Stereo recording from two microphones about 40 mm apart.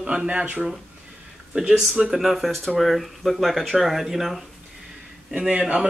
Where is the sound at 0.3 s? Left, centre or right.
Right.